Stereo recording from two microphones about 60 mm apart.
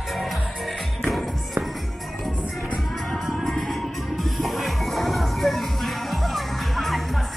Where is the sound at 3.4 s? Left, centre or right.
Centre.